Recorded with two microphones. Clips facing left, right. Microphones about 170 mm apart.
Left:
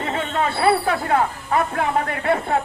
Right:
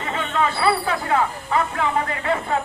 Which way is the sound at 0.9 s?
50° left (ahead or behind).